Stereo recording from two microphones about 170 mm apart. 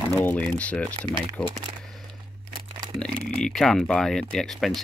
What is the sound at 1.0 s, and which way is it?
Speech, 30° right (ahead or behind).